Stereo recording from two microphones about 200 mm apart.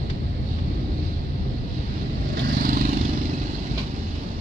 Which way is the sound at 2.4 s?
45° right (ahead or behind).